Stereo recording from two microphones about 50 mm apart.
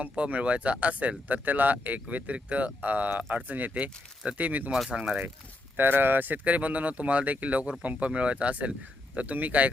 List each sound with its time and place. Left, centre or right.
0.0 s speech: right
4.9 s speech: right
5.7 s speech: right